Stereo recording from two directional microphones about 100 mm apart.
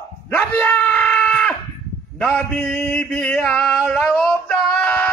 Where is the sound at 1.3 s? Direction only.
10° left (ahead or behind).